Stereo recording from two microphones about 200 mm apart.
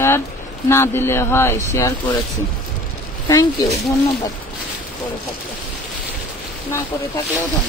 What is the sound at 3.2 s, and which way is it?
Speech, 15° left (ahead or behind).